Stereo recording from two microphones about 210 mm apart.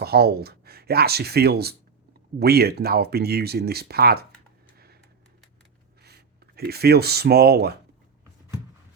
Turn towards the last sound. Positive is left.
turn(degrees=-50)  # may be behind; listen again after turning